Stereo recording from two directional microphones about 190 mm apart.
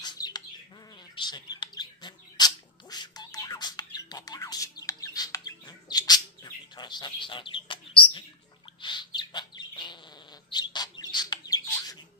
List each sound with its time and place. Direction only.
0.0 s bird: 20° left (ahead or behind)